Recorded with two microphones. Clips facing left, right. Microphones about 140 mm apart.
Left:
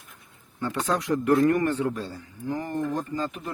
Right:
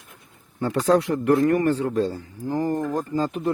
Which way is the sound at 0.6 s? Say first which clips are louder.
Right 7 dB; 30° right (ahead or behind).